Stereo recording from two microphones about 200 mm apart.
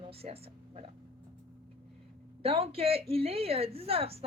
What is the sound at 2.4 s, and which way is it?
Speech, 30° right (ahead or behind).